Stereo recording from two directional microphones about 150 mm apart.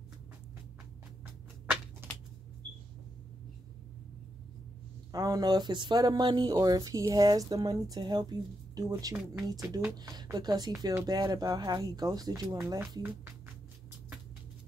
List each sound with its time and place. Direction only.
5.1 s speech: 25° right (ahead or behind)